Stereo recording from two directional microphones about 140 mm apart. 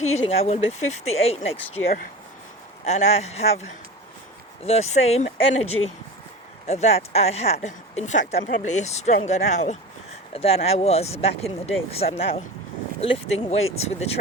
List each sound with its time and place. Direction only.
0.0 s speech: 50° left (ahead or behind)
2.8 s speech: 50° left (ahead or behind)
4.6 s a woman's voice: 50° left (ahead or behind)
10.3 s speech: 45° left (ahead or behind)